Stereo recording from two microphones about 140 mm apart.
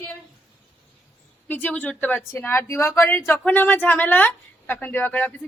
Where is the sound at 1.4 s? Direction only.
10° left (ahead or behind).